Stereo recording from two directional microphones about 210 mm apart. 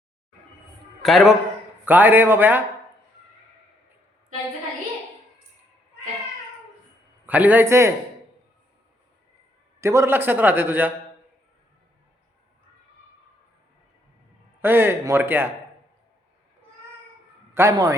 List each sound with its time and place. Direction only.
1.0 s a man's voice: centre (ahead or behind)
7.3 s a man's voice: 5° right (ahead or behind)
9.8 s a man's voice: 15° right (ahead or behind)
14.6 s a man's voice: 10° right (ahead or behind)
17.5 s a man's voice: 15° right (ahead or behind)